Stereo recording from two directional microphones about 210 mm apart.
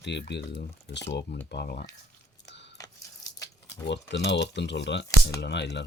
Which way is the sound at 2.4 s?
55° left (ahead or behind).